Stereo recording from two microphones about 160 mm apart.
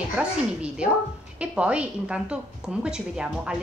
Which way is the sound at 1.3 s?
10° right (ahead or behind).